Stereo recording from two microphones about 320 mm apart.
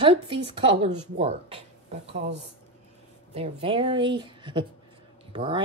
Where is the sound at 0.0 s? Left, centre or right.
Centre.